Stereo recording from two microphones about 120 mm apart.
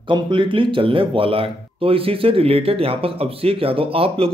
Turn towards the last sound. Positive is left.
turn(degrees=-50)  # may be behind; listen again after turning